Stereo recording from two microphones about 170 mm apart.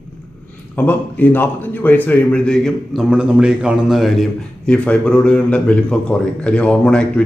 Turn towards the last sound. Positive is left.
turn(degrees=5)  # may be behind; listen again after turning